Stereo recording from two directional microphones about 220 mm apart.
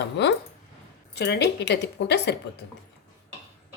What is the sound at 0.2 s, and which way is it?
Speech, 50° left (ahead or behind).